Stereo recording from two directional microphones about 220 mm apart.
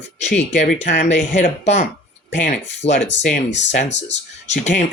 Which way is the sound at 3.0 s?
55° left (ahead or behind).